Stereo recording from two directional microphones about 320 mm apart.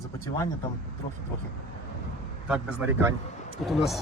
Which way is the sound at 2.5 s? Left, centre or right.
Centre.